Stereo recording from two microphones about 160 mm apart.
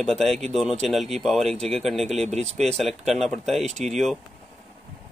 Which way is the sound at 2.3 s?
45° right (ahead or behind).